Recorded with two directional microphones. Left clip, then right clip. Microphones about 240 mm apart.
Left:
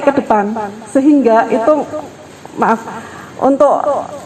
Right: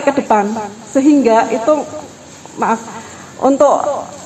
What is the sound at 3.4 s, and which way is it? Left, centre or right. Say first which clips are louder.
Speech: even; left.